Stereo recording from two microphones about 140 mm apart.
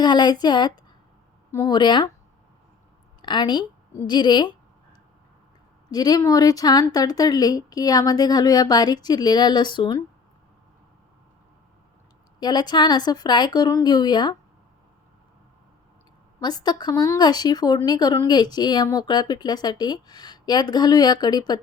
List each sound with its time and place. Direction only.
0.0 s speech: 30° left (ahead or behind)
3.2 s a sound: 35° left (ahead or behind)
5.9 s speech: 30° left (ahead or behind)
12.4 s speech: 30° left (ahead or behind)
16.4 s speech: 30° left (ahead or behind)